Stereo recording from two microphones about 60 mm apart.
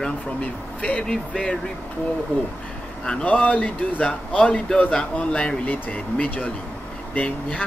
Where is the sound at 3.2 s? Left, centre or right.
Left.